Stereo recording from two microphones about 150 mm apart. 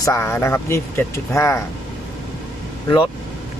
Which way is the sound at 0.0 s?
20° left (ahead or behind).